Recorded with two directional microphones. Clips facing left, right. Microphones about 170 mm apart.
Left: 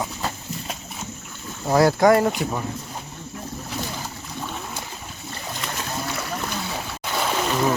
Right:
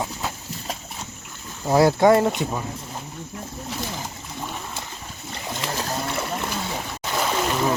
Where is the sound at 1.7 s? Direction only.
25° right (ahead or behind).